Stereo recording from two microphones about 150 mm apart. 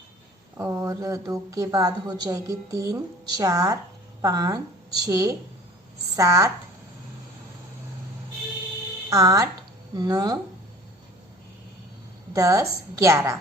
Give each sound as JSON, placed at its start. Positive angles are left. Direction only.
{"t": 0.5, "sound": "a woman's voice", "side_deg": -20}
{"t": 9.0, "sound": "a woman's voice", "side_deg": -20}
{"t": 12.3, "sound": "a woman's voice", "side_deg": -20}